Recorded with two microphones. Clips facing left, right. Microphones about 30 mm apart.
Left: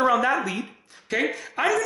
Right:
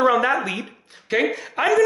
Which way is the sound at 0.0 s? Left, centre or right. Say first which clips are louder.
Right 3 dB; centre.